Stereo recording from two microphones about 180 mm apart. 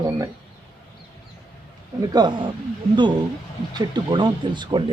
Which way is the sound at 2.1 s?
25° right (ahead or behind).